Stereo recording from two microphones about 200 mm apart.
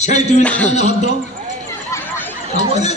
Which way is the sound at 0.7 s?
35° left (ahead or behind).